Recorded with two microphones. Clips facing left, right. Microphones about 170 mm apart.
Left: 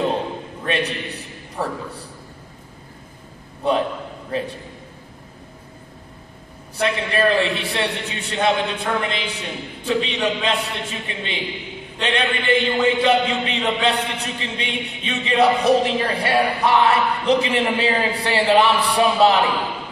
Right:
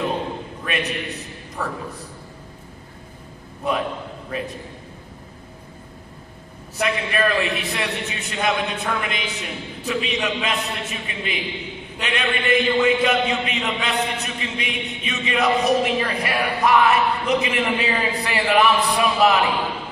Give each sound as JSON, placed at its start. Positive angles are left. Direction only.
{"t": 0.7, "sound": "a sound", "side_deg": 30}
{"t": 4.3, "sound": "a man's voice", "side_deg": 30}
{"t": 6.8, "sound": "a man's voice", "side_deg": 30}